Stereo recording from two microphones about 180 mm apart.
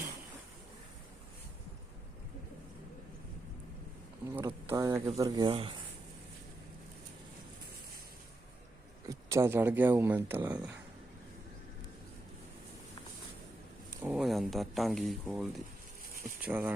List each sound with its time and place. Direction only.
4.4 s speech: 20° right (ahead or behind)
9.0 s speech: 15° right (ahead or behind)
14.0 s speech: 5° right (ahead or behind)